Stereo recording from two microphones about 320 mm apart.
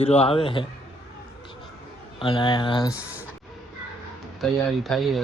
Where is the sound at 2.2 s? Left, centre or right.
Centre.